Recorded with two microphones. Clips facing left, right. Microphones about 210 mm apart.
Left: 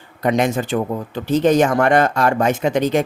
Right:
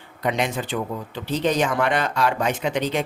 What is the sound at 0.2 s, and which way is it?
Speech, 45° left (ahead or behind).